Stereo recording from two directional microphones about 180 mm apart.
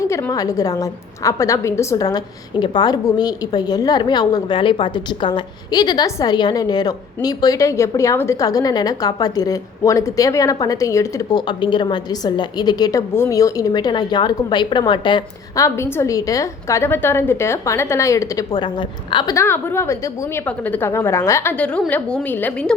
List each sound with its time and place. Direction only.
0.0 s a woman's voice: 15° left (ahead or behind)